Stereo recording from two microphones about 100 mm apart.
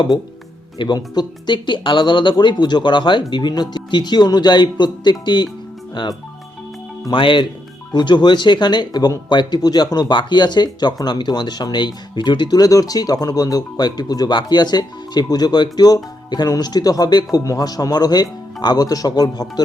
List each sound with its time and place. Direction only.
0.8 s speech: 45° left (ahead or behind)